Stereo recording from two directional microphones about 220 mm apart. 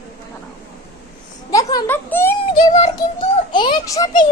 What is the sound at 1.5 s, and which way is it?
Speech, 10° left (ahead or behind).